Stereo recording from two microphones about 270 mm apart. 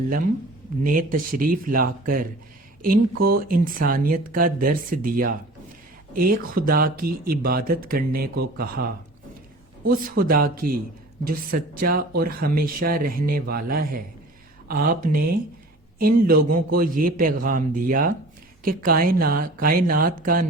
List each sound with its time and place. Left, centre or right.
0.9 s speech: right
3.2 s speech: right
9.9 s speech: right